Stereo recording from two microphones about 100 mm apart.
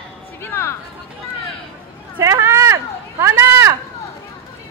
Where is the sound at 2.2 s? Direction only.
30° right (ahead or behind).